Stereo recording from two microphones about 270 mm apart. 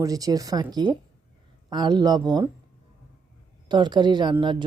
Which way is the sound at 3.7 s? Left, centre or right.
Centre.